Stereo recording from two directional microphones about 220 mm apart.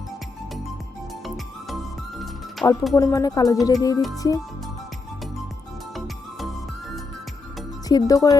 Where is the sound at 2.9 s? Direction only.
15° left (ahead or behind).